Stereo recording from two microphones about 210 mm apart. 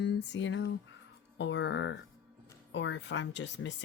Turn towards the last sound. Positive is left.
turn(degrees=60)  # may be behind; listen again after turning